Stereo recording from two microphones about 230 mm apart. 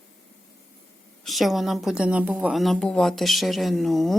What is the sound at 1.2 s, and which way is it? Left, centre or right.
Speech, centre.